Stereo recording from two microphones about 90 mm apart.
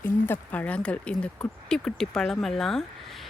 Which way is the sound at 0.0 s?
20° left (ahead or behind).